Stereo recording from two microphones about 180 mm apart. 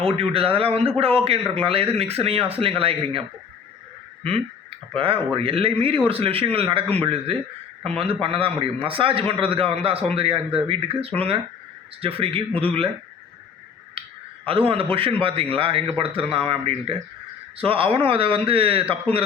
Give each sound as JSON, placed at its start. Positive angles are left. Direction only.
{"t": 0.0, "sound": "a man's voice", "side_deg": -30}
{"t": 4.9, "sound": "a man's voice", "side_deg": -30}
{"t": 14.4, "sound": "a man's voice", "side_deg": -30}